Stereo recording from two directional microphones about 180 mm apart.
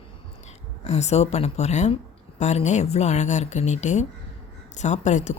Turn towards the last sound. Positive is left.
turn(degrees=40)  # may be behind; listen again after turning